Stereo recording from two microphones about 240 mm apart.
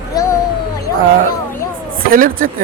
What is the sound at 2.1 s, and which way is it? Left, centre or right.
Speech, right.